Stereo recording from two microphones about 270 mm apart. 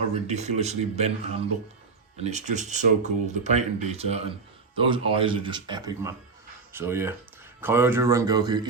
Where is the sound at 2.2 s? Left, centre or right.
Right.